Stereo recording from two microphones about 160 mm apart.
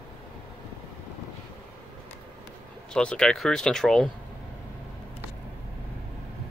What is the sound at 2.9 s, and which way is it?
Speech, 5° left (ahead or behind).